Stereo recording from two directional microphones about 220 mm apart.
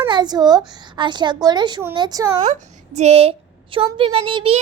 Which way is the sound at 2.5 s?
30° right (ahead or behind).